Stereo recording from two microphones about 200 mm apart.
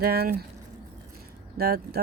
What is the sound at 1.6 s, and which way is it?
Speech, 50° right (ahead or behind).